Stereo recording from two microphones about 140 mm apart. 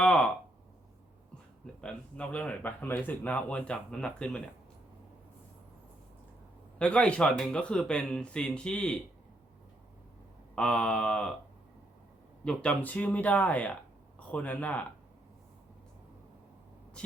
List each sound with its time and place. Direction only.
0.0 s a sound: 5° left (ahead or behind)
1.6 s speech: 5° left (ahead or behind)
6.7 s speech: 10° left (ahead or behind)
10.5 s speech: 5° left (ahead or behind)
12.5 s speech: 10° left (ahead or behind)